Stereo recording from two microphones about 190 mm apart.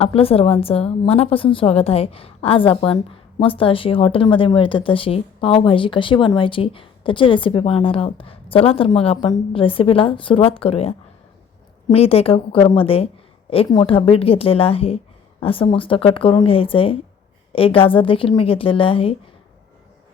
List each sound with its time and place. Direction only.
0.0 s a woman's voice: 30° left (ahead or behind)
11.9 s a woman's voice: 30° left (ahead or behind)